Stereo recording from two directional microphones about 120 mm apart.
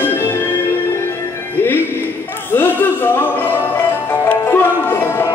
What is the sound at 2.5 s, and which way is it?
Music, 15° left (ahead or behind).